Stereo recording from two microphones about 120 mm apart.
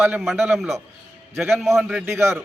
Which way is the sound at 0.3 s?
20° right (ahead or behind).